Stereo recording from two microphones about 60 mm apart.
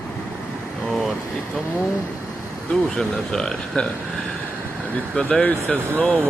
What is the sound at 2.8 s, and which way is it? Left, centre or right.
Speech, centre.